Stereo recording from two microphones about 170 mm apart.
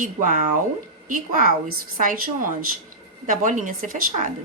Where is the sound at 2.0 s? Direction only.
50° right (ahead or behind).